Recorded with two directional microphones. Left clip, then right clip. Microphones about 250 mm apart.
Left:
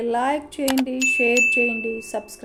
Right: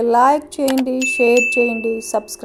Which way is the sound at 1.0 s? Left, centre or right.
Right.